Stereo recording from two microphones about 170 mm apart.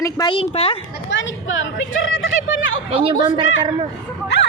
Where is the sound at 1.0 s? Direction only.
90° left.